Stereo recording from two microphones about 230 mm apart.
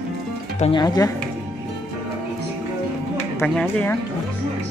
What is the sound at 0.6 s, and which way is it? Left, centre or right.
Speech, left.